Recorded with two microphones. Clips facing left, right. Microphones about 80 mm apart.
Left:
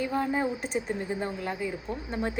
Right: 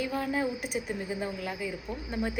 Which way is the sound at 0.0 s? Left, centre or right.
Left.